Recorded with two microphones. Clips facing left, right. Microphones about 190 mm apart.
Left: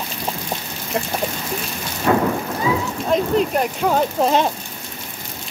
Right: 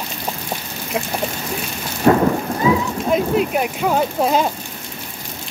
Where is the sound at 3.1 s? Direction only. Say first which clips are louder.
Even; 5° right (ahead or behind).